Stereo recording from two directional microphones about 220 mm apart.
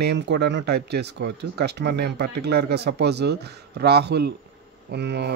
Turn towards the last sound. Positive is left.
turn(degrees=-50)  # may be behind; listen again after turning